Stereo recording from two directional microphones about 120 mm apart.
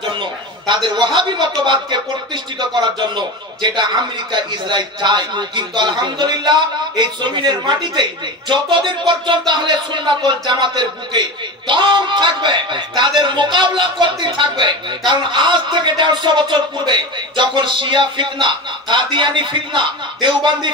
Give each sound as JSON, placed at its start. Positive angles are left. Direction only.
{"t": 0.2, "sound": "a man's voice", "side_deg": -40}